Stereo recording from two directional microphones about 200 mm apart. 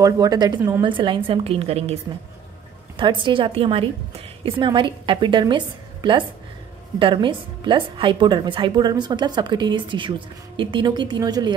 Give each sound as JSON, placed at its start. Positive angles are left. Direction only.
{"t": 0.0, "sound": "speech", "side_deg": -20}
{"t": 3.0, "sound": "a woman's voice", "side_deg": -25}